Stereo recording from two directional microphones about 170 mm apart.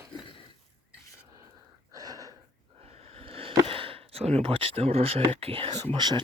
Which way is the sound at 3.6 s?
30° right (ahead or behind).